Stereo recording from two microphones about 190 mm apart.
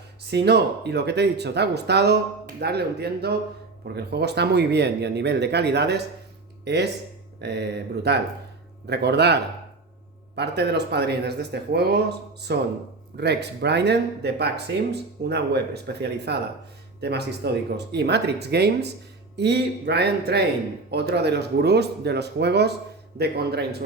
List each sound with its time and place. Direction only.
0.3 s speech: 60° right (ahead or behind)